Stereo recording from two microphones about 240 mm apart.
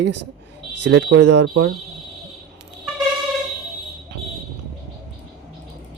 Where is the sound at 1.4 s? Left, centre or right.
Right.